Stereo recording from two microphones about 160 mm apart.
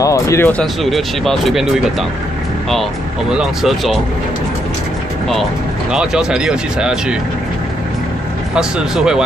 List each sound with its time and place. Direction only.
0.0 s speech: 20° left (ahead or behind)
0.5 s speech: 5° left (ahead or behind)
5.9 s speech: 5° right (ahead or behind)
8.5 s speech: 5° right (ahead or behind)